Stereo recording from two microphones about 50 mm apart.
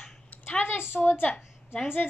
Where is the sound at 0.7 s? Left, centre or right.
Left.